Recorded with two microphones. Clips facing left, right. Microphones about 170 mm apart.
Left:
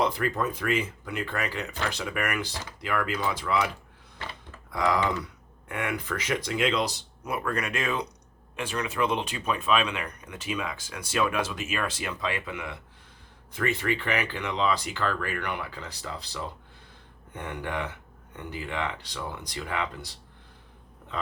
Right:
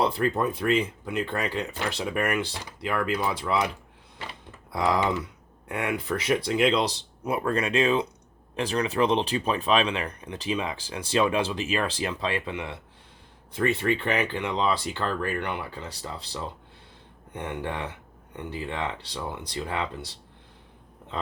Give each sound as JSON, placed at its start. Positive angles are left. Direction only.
{"t": 0.0, "sound": "speech", "side_deg": -30}
{"t": 4.7, "sound": "speech", "side_deg": -25}